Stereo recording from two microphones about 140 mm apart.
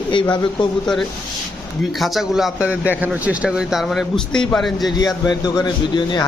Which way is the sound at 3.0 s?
10° right (ahead or behind).